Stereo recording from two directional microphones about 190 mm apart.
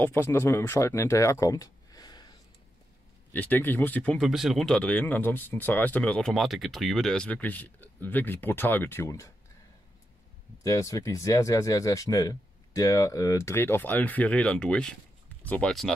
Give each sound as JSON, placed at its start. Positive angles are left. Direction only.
{"t": 0.0, "sound": "speech", "side_deg": 10}
{"t": 3.3, "sound": "speech", "side_deg": 10}
{"t": 10.6, "sound": "speech", "side_deg": 15}